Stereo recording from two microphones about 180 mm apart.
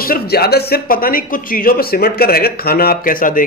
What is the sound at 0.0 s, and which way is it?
Speech, 55° left (ahead or behind).